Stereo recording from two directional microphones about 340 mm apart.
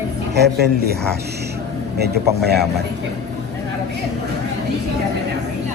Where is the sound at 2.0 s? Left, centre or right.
Right.